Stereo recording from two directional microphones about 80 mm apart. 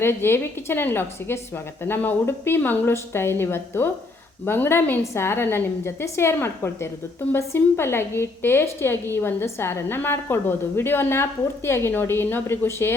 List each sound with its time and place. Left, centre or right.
0.0 s a woman's voice: left